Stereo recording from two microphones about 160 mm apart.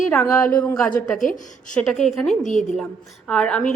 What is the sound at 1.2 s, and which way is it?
Speech, 55° left (ahead or behind).